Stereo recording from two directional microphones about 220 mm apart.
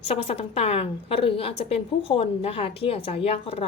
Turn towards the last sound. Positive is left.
turn(degrees=25)  # may be behind; listen again after turning